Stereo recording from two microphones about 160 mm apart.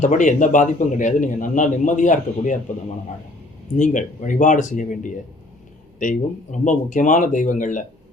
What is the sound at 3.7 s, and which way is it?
A man's voice, 50° left (ahead or behind).